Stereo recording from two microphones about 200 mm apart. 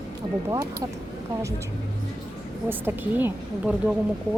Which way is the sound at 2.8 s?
10° right (ahead or behind).